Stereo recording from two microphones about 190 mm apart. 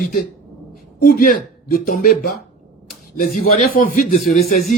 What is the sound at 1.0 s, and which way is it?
Speech, 45° left (ahead or behind).